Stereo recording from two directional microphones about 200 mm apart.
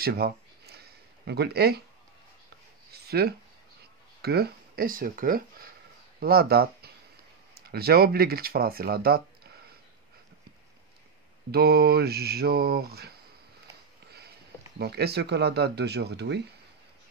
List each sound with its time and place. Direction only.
0.0 s a sound: 50° right (ahead or behind)
1.2 s speech: 55° right (ahead or behind)
2.9 s a sound: 50° right (ahead or behind)
4.2 s speech: 50° right (ahead or behind)
11.5 s speech: 50° right (ahead or behind)
14.8 s speech: 55° right (ahead or behind)